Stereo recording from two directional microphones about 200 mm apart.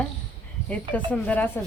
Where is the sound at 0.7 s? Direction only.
5° left (ahead or behind).